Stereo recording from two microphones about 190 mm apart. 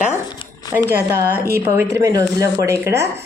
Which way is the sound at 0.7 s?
10° right (ahead or behind).